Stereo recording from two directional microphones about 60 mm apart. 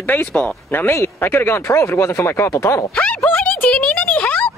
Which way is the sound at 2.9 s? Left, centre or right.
Left.